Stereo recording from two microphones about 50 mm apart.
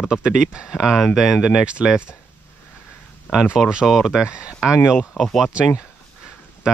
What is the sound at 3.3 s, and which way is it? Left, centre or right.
Speech, left.